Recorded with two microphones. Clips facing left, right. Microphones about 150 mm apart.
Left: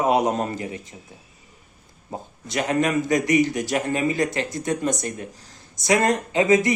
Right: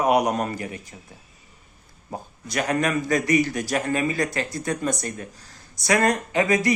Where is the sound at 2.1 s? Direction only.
20° left (ahead or behind).